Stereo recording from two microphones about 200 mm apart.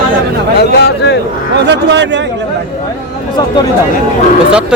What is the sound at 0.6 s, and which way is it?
Speech, 55° left (ahead or behind).